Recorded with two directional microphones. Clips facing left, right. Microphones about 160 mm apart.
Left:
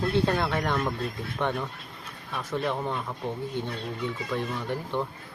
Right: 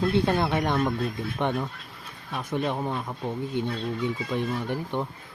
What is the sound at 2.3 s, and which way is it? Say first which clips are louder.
Speech: right 1 dB; 15° right (ahead or behind).